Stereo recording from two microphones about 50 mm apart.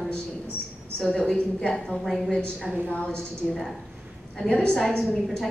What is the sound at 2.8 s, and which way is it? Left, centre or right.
A woman's voice, left.